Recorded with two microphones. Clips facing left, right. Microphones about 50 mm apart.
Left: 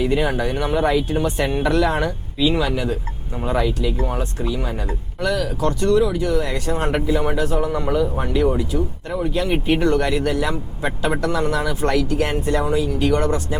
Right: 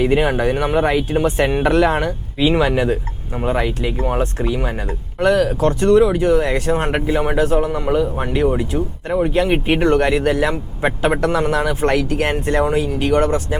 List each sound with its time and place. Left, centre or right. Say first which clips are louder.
0.0 s speech: right 4 dB; right
4.2 s speech: right 5 dB; right
4.5 s speech: right 3 dB; right